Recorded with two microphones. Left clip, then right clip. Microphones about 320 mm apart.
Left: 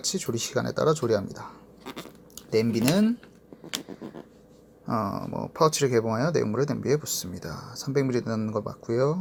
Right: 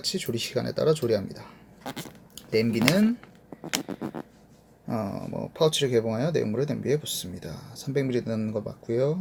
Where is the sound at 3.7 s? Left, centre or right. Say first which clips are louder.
Right 4 dB; centre.